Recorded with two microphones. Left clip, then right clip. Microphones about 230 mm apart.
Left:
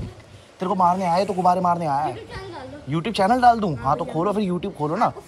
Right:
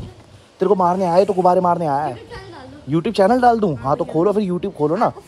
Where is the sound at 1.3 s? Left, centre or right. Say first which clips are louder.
Right 4 dB; right.